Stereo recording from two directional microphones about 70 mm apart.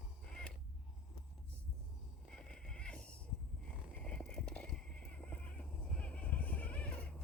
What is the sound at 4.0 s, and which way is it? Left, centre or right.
Horse, centre.